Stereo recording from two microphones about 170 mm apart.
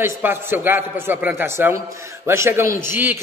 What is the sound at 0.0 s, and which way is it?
A man's voice, 15° right (ahead or behind).